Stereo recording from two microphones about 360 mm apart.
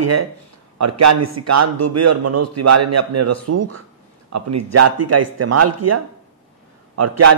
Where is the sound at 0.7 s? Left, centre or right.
Right.